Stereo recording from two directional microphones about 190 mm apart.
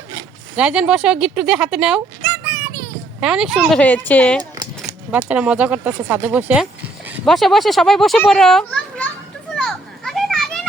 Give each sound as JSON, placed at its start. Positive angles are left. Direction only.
{"t": 0.5, "sound": "a child's voice", "side_deg": -5}
{"t": 3.2, "sound": "a child's voice", "side_deg": -5}
{"t": 4.5, "sound": "a sound", "side_deg": -20}
{"t": 5.1, "sound": "a child's voice", "side_deg": -5}
{"t": 9.6, "sound": "children playing", "side_deg": 5}